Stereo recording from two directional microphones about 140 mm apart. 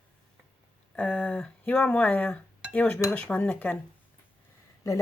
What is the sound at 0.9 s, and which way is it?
Speech, 10° left (ahead or behind).